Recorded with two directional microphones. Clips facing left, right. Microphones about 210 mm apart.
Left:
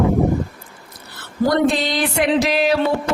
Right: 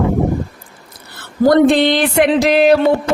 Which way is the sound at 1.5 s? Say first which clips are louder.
Right 8 dB; 55° right (ahead or behind).